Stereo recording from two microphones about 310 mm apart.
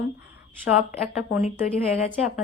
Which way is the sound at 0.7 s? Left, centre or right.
Centre.